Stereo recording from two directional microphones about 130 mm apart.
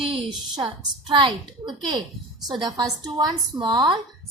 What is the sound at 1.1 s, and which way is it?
A woman's voice, 40° right (ahead or behind).